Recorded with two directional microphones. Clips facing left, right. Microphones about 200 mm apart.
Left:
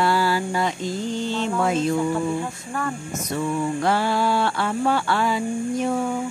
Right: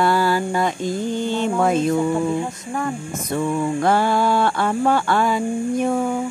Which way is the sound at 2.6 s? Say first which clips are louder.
Right 3 dB; 15° right (ahead or behind).